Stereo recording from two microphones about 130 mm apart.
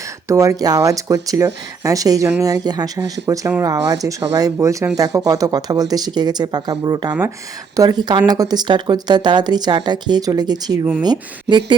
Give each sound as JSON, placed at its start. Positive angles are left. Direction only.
{"t": 0.3, "sound": "speech", "side_deg": -25}